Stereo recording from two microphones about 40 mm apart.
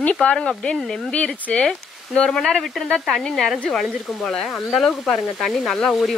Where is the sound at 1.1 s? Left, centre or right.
Left.